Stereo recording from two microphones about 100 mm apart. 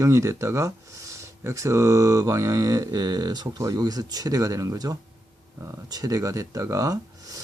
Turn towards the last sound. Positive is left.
turn(degrees=-35)  # may be behind; listen again after turning